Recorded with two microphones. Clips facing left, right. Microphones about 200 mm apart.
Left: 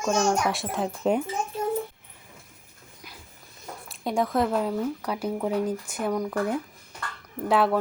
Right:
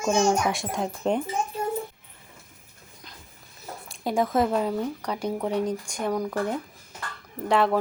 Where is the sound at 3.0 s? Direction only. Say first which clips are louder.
Left 2 dB; 10° left (ahead or behind).